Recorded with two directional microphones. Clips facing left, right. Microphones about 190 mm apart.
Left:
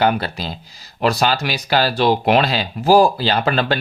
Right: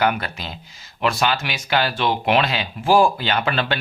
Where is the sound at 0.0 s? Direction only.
35° left (ahead or behind).